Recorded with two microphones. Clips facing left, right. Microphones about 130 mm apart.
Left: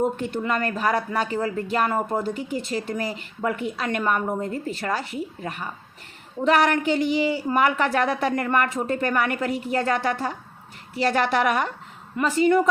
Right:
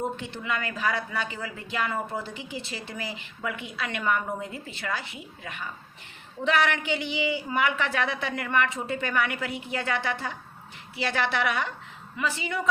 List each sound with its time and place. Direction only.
0.0 s speech: 50° left (ahead or behind)